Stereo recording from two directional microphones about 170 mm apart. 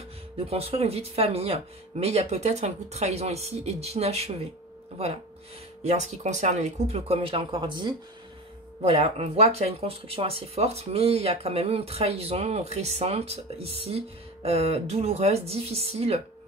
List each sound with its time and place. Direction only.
0.4 s speech: 35° right (ahead or behind)